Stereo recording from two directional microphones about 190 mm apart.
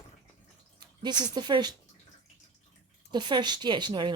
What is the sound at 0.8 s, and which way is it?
Speech, 25° right (ahead or behind).